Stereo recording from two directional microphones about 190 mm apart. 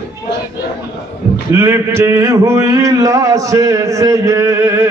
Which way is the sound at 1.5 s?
15° right (ahead or behind).